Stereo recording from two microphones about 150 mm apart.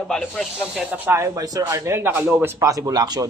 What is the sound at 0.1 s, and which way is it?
Speech, centre (ahead or behind).